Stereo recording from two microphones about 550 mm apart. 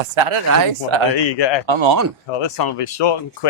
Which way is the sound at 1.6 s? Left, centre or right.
Right.